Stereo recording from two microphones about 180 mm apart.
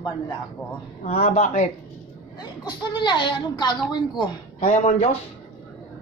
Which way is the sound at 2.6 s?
25° left (ahead or behind).